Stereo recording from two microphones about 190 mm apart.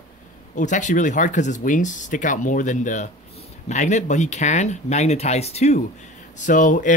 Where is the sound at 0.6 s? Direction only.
40° left (ahead or behind).